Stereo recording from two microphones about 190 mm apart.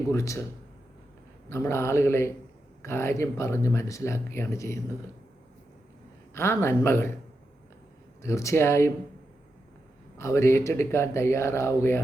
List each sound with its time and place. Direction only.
0.1 s speech: 15° left (ahead or behind)
1.5 s speech: 15° left (ahead or behind)
6.3 s speech: 15° left (ahead or behind)
8.2 s speech: 15° left (ahead or behind)
10.2 s speech: 15° left (ahead or behind)